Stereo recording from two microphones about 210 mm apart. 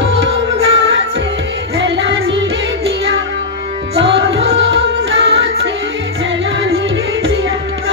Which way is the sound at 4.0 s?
65° right (ahead or behind).